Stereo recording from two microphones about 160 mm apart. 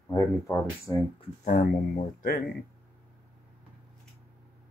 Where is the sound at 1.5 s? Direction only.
55° left (ahead or behind).